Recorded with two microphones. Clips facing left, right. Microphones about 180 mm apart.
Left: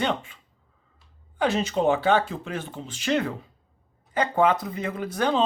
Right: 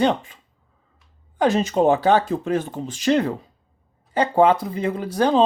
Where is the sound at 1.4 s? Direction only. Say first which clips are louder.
Right 5 dB; 45° right (ahead or behind).